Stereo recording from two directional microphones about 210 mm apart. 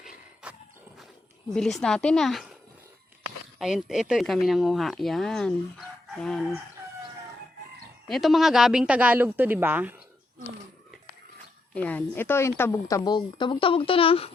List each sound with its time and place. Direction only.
0.4 s horse: 5° right (ahead or behind)
1.5 s speech: 5° left (ahead or behind)
3.6 s speech: centre (ahead or behind)
8.0 s a woman's voice: centre (ahead or behind)
11.7 s a woman's voice: 5° left (ahead or behind); by 14.3 s 25° left (ahead or behind)